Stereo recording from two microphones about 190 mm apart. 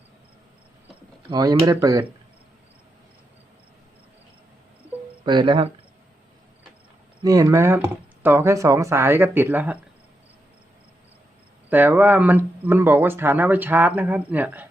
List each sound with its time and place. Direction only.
1.3 s speech: 20° right (ahead or behind)
5.2 s cricket: 25° right (ahead or behind)
7.2 s speech: 20° right (ahead or behind)
11.7 s speech: 10° right (ahead or behind)